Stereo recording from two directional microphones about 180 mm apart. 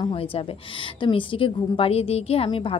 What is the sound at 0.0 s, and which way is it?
A woman's voice, 30° left (ahead or behind).